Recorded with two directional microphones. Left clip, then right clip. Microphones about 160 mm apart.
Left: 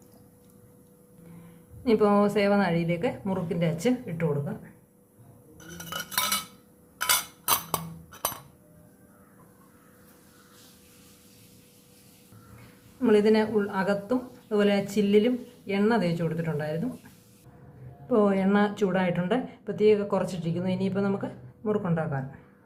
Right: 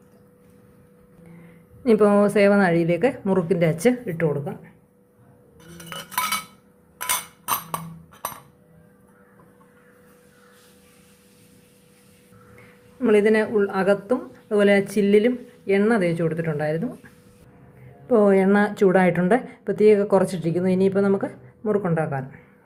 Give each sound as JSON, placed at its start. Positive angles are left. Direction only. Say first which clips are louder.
{"t": 1.8, "sound": "a woman's voice", "louder": "right 5 dB", "side_deg": -25}
{"t": 5.9, "sound": "cutlery", "louder": "right 3 dB", "side_deg": -5}
{"t": 13.0, "sound": "a woman's voice", "louder": "right 4 dB", "side_deg": -25}
{"t": 18.1, "sound": "a woman's voice", "louder": "right 7 dB", "side_deg": -30}